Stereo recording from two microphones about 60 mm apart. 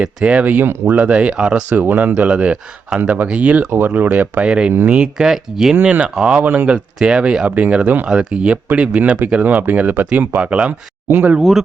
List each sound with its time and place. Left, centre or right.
0.0 s speech: centre
1.7 s speech: right
3.7 s speech: right; by 5.2 s centre
5.2 s speech: centre
5.8 s speech: right
6.4 s speech: right
7.0 s speech: centre
11.3 s speech: centre